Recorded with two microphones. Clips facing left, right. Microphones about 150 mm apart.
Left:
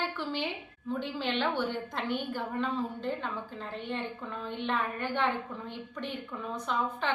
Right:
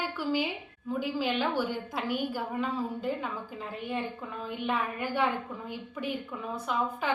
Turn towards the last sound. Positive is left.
turn(degrees=-5)  # may be behind; listen again after turning